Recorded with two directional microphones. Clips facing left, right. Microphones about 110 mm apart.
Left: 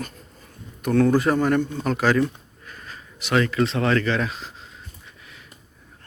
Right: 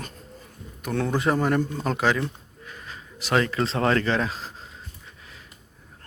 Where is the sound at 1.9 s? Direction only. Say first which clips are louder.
Left 3 dB; 20° right (ahead or behind).